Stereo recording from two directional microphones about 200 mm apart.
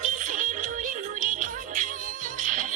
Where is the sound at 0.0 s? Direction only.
40° right (ahead or behind).